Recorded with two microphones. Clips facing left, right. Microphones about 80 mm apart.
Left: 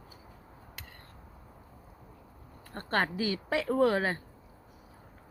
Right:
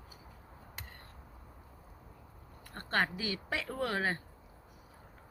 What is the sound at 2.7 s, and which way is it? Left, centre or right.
Speech, left.